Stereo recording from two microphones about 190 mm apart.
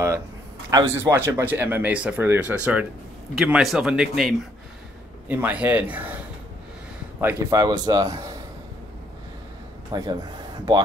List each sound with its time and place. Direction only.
0.7 s speech: 15° right (ahead or behind)
7.2 s speech: 10° right (ahead or behind)
9.9 s a man's voice: 20° right (ahead or behind)